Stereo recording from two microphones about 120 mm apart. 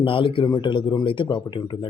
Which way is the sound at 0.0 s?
50° left (ahead or behind).